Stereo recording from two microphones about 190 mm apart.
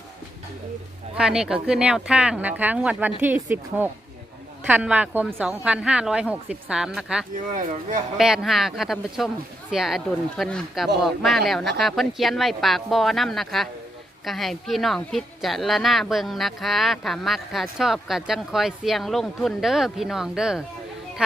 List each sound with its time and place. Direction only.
1.1 s a woman's voice: 5° right (ahead or behind)
7.3 s speech: 45° right (ahead or behind)
8.2 s a woman's voice: centre (ahead or behind)